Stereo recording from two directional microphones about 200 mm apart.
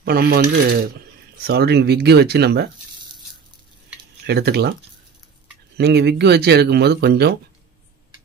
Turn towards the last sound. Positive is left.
turn(degrees=-55)  # may be behind; listen again after turning